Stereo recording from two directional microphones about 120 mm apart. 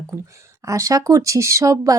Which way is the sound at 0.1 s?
25° right (ahead or behind).